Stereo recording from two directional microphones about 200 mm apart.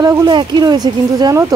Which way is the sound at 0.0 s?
20° right (ahead or behind).